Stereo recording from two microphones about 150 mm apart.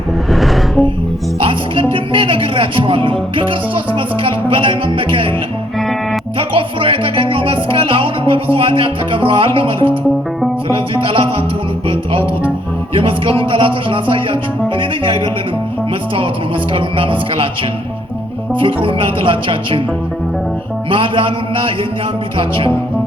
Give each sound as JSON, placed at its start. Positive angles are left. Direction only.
{"t": 0.3, "sound": "music", "side_deg": 0}
{"t": 1.4, "sound": "music", "side_deg": -35}
{"t": 6.5, "sound": "music", "side_deg": -35}
{"t": 12.9, "sound": "music", "side_deg": -35}
{"t": 16.7, "sound": "music", "side_deg": -35}
{"t": 18.6, "sound": "music", "side_deg": -35}
{"t": 20.9, "sound": "music", "side_deg": -35}